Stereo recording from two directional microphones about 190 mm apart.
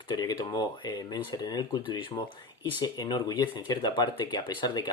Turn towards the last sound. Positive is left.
turn(degrees=25)  # may be behind; listen again after turning